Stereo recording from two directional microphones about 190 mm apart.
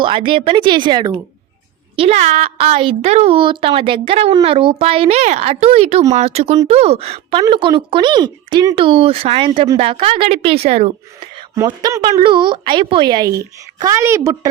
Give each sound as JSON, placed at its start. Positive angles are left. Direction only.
{"t": 0.0, "sound": "speech", "side_deg": -25}
{"t": 2.0, "sound": "a woman's voice", "side_deg": -35}
{"t": 11.5, "sound": "a woman's voice", "side_deg": -20}